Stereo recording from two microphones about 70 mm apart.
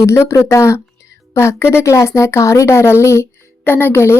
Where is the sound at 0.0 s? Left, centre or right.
Left.